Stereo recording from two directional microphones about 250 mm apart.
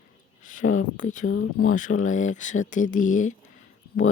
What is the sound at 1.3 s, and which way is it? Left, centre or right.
Speech, left.